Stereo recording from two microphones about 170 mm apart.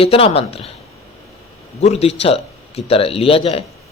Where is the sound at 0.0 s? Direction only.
35° left (ahead or behind).